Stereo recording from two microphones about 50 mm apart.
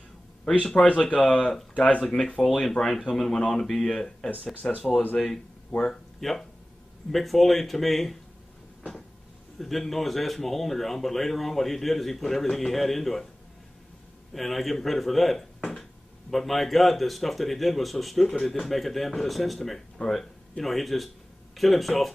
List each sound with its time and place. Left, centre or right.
0.8 s speech: left
2.0 s speech: centre
9.6 s speech: centre
14.3 s speech: centre
20.0 s speech: left
20.6 s speech: centre